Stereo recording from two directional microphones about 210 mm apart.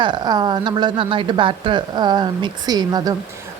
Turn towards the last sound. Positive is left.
turn(degrees=-20)  # may be behind; listen again after turning